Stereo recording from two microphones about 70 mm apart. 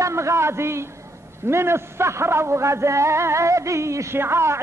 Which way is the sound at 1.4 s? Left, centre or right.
Right.